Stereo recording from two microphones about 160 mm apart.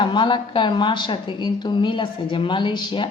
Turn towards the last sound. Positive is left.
turn(degrees=30)  # may be behind; listen again after turning